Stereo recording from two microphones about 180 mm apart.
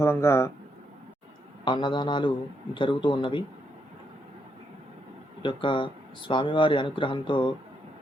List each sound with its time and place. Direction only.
0.0 s speech: 15° left (ahead or behind)
1.6 s speech: 25° left (ahead or behind)
5.4 s speech: 30° left (ahead or behind)